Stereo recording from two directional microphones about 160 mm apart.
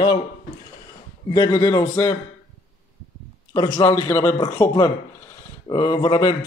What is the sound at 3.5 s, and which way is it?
Speech, 20° left (ahead or behind).